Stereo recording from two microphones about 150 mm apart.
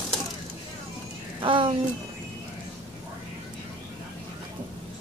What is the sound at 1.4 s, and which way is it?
Speech, 35° right (ahead or behind).